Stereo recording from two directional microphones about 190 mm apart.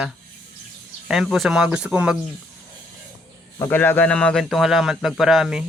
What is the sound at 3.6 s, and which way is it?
Speech, 10° left (ahead or behind).